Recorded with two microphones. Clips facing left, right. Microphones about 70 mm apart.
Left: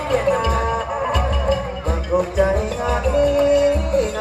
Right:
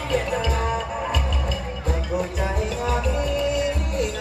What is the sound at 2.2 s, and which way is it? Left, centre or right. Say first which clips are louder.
Music: left 12 dB; left.